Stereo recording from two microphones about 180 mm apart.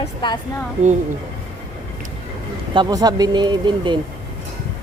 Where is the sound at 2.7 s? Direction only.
25° right (ahead or behind).